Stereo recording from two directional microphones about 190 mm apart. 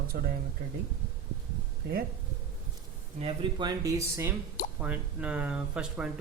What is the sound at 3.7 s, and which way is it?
Speech, 15° right (ahead or behind).